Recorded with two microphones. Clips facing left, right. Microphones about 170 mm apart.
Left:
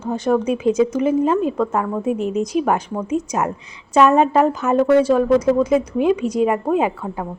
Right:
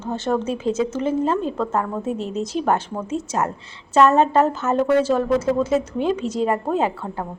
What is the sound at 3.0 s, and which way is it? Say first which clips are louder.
A woman's voice: left 3 dB; 15° left (ahead or behind).